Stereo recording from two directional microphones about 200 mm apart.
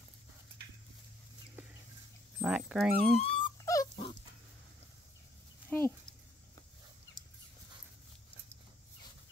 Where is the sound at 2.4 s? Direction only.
5° right (ahead or behind).